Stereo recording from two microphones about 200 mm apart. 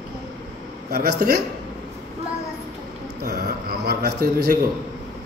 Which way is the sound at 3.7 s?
50° right (ahead or behind).